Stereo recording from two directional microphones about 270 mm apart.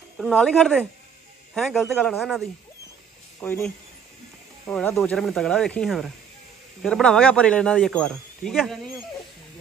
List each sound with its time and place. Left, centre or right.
0.2 s speech: centre